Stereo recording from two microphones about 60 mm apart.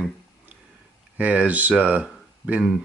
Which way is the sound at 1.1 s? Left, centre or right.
Right.